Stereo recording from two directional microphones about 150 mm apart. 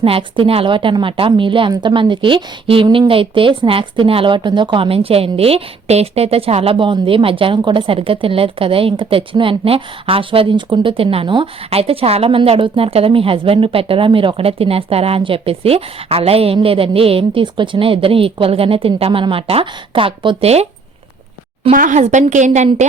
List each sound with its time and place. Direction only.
0.0 s a woman's voice: 35° right (ahead or behind)
21.7 s a woman's voice: 60° right (ahead or behind)